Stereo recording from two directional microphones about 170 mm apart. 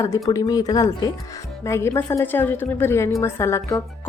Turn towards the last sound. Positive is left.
turn(degrees=15)  # may be behind; listen again after turning